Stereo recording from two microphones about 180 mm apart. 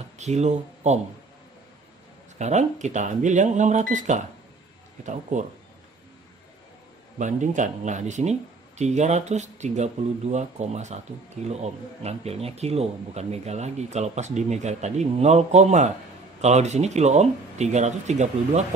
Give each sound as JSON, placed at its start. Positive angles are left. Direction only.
{"t": 0.2, "sound": "speech", "side_deg": -40}
{"t": 2.3, "sound": "speech", "side_deg": -40}
{"t": 7.2, "sound": "speech", "side_deg": -45}